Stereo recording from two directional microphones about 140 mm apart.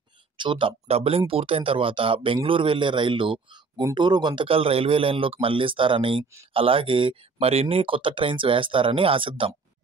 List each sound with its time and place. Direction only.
0.4 s speech: 35° right (ahead or behind)